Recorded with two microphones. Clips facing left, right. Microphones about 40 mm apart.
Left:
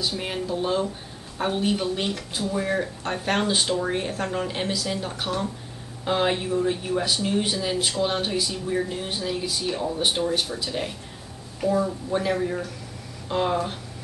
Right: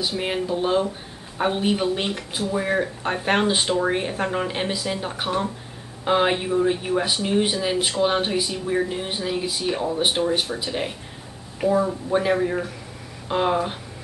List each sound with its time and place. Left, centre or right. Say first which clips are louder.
0.0 s speech: right 3 dB; centre